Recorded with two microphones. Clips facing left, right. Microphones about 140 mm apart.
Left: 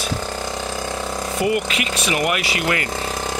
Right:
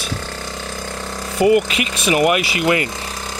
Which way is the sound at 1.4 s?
20° right (ahead or behind).